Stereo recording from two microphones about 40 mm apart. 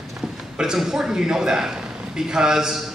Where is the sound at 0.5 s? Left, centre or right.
Centre.